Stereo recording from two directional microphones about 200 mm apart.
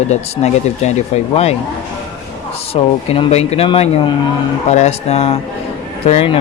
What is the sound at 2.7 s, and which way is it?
Speech, 30° left (ahead or behind).